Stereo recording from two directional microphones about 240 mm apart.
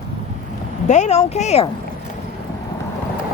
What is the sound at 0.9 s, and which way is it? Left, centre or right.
Speech, left.